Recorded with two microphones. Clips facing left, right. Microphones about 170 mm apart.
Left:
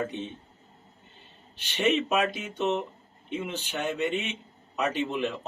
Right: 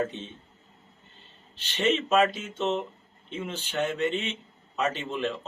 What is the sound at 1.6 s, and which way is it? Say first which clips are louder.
A man's voice: left 1 dB; 10° left (ahead or behind).